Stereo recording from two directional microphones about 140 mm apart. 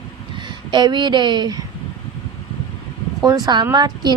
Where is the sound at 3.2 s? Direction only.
30° right (ahead or behind).